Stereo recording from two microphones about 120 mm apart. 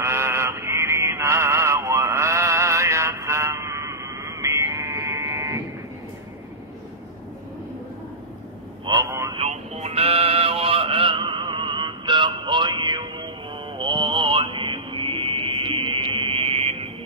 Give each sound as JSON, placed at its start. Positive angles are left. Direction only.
{"t": 0.0, "sound": "synthetic singing", "side_deg": -20}
{"t": 9.0, "sound": "a sound", "side_deg": -25}
{"t": 9.4, "sound": "male singing", "side_deg": -65}